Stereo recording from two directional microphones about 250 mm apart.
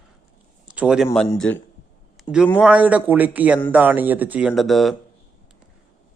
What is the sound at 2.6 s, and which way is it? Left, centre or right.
Speech, centre.